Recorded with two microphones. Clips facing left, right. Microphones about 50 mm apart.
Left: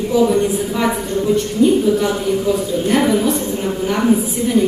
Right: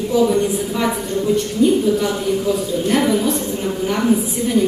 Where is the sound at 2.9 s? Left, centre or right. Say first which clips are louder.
Left 2 dB; centre.